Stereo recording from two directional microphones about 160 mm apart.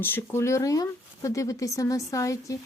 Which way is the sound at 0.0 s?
15° left (ahead or behind).